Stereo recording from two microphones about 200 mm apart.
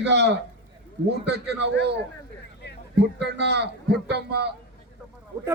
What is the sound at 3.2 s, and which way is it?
A man's voice, 55° right (ahead or behind).